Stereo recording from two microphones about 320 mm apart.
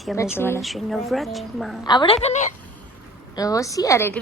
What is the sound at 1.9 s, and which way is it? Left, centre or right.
A woman's voice, centre.